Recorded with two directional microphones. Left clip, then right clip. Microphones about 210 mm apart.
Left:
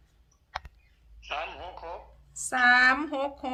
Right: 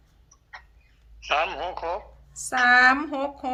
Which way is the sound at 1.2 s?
50° right (ahead or behind).